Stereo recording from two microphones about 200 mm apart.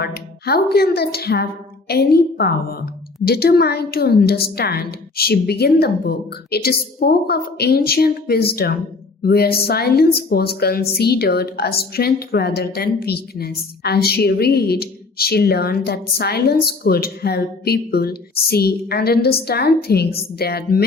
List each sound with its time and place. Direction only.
0.0 s a woman's voice: 50° left (ahead or behind)